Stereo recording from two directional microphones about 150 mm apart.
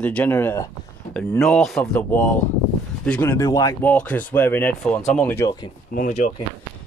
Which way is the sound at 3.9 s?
10° left (ahead or behind).